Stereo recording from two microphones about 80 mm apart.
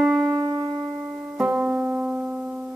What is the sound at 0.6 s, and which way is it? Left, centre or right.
Music, centre.